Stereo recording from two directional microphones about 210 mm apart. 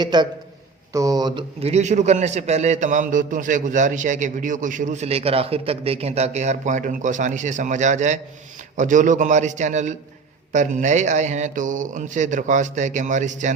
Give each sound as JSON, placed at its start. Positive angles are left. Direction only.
{"t": 0.0, "sound": "a man's voice", "side_deg": -20}